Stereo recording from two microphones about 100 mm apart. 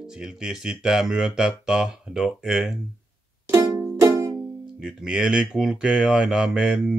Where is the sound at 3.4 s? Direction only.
30° right (ahead or behind).